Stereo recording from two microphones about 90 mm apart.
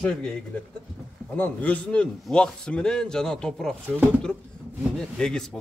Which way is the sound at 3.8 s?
25° right (ahead or behind).